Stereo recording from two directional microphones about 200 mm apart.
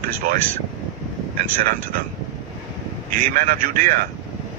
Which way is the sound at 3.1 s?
45° right (ahead or behind).